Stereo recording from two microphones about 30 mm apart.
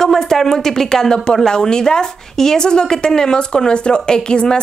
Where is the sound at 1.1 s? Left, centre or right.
Left.